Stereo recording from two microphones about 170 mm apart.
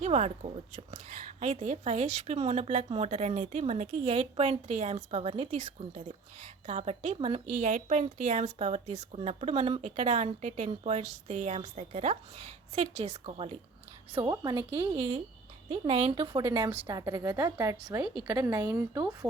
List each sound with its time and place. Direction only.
0.0 s a woman's voice: 40° right (ahead or behind)
14.1 s a woman's voice: 25° right (ahead or behind)